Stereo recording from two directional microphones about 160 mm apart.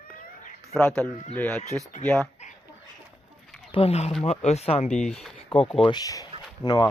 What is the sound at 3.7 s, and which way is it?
Speech, 40° left (ahead or behind).